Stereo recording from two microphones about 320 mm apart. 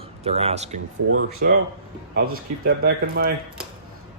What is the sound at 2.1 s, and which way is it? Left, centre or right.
Speech, right.